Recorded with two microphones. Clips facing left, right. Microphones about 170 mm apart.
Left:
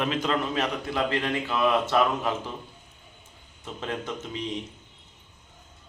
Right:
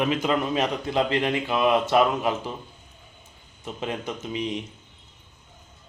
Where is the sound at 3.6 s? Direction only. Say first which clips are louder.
Right 2 dB; 15° right (ahead or behind).